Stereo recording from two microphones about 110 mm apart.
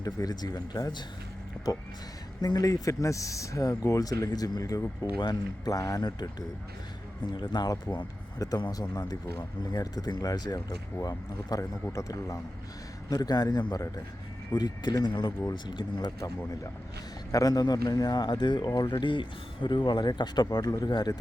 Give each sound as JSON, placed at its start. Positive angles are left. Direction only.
{"t": 0.0, "sound": "speech", "side_deg": 35}
{"t": 2.4, "sound": "speech", "side_deg": 35}
{"t": 7.3, "sound": "speech", "side_deg": 40}
{"t": 17.3, "sound": "speech", "side_deg": 35}